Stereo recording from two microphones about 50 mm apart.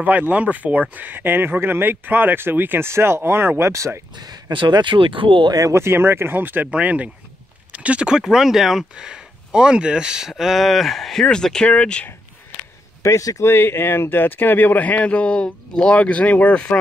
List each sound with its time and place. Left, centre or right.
0.0 s speech: right
2.9 s speech: right
5.7 s speech: right; by 11.2 s centre
11.2 s speech: centre
13.0 s speech: left
13.6 s a man's voice: left